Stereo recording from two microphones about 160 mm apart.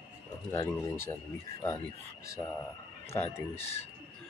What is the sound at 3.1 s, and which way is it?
Speech, 15° left (ahead or behind).